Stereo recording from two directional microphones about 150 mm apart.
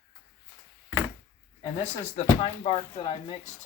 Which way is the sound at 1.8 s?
45° left (ahead or behind).